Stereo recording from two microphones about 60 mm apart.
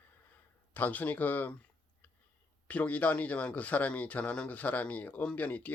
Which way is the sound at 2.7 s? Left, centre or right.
Left.